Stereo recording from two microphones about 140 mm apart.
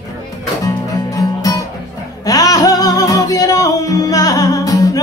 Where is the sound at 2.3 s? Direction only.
25° left (ahead or behind).